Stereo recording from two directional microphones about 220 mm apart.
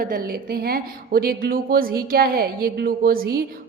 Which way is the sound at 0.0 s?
40° right (ahead or behind).